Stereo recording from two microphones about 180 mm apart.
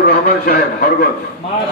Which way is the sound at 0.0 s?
55° left (ahead or behind).